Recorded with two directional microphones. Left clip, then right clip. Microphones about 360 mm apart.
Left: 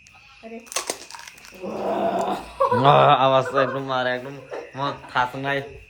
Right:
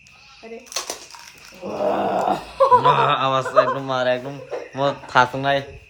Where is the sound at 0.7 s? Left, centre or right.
Left.